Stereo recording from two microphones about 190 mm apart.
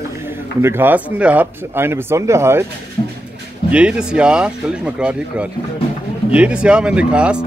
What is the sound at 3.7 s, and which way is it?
Speech, 5° right (ahead or behind).